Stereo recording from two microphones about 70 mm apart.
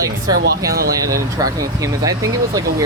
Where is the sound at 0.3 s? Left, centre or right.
Right.